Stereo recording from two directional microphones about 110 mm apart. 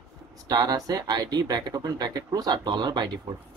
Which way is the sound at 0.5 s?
35° right (ahead or behind).